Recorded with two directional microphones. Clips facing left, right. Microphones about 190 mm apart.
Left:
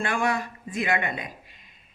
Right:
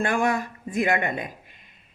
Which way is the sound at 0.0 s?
45° right (ahead or behind).